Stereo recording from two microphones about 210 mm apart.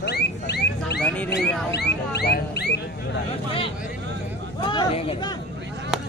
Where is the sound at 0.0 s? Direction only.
50° left (ahead or behind).